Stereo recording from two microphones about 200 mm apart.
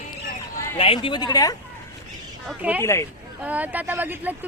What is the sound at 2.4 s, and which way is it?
Speech, 5° right (ahead or behind).